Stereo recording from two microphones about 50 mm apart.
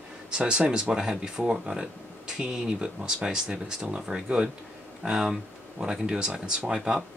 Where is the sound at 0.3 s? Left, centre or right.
Centre.